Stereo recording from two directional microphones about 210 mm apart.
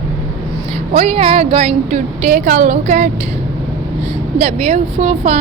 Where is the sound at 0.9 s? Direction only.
30° right (ahead or behind).